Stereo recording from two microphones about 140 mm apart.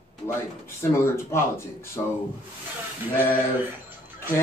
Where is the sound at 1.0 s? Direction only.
20° left (ahead or behind).